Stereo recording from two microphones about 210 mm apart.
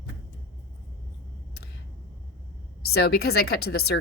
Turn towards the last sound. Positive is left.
turn(degrees=50)  # may be behind; listen again after turning